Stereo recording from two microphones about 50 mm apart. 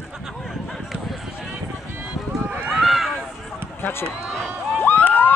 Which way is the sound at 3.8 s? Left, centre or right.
Left.